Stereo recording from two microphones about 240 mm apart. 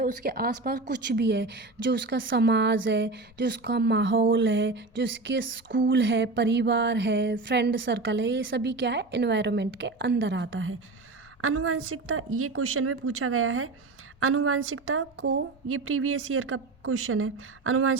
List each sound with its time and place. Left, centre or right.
0.0 s a woman's voice: right